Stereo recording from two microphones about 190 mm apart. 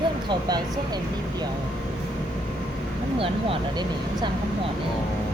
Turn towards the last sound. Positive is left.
turn(degrees=-30)  # may be behind; listen again after turning